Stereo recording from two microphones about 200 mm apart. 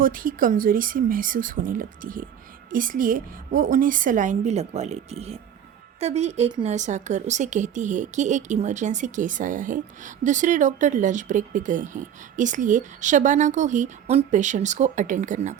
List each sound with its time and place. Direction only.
0.0 s speech: 45° right (ahead or behind); by 6.7 s 25° right (ahead or behind)
6.7 s speech: 35° right (ahead or behind)